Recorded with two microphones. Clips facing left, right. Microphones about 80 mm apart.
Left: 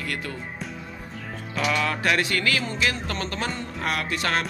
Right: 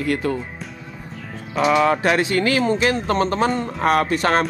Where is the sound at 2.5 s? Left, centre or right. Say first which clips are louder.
Right 8 dB; right.